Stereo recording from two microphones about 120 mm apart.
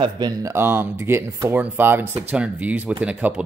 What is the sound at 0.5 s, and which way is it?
Speech, 20° right (ahead or behind).